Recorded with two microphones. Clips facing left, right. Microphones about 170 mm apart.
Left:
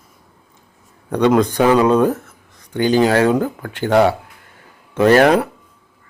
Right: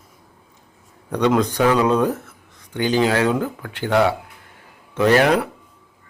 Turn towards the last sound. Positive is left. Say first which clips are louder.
# left 4 dB
turn(degrees=50)  # may be behind; listen again after turning